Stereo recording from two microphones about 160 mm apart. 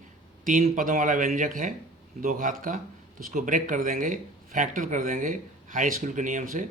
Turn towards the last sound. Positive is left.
turn(degrees=-55)  # may be behind; listen again after turning